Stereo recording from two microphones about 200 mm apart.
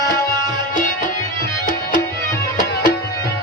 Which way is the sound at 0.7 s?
40° left (ahead or behind).